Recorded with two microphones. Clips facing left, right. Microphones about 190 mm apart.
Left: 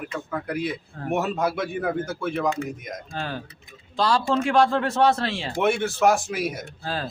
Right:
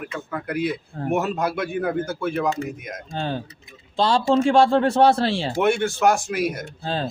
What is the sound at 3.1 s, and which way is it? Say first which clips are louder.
Speech: right 6 dB; 25° right (ahead or behind).